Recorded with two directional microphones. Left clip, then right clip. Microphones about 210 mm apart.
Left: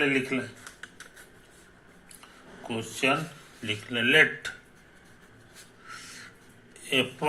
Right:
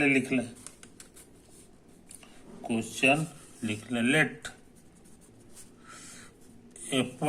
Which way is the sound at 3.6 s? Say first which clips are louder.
Left 3 dB; 25° right (ahead or behind).